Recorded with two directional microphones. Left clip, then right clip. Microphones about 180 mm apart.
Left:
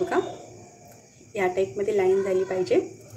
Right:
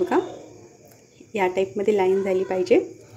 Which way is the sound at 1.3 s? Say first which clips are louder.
Right 2 dB; 40° right (ahead or behind).